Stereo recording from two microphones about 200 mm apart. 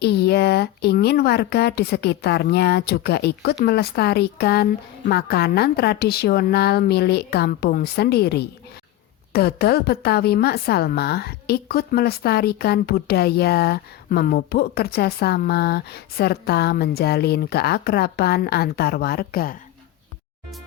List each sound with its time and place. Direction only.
0.0 s a woman's voice: 55° left (ahead or behind)